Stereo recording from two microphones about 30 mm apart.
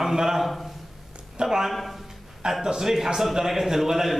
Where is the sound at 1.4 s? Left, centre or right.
Centre.